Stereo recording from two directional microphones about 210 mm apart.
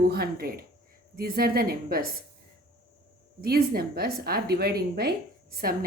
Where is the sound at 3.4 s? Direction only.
45° right (ahead or behind).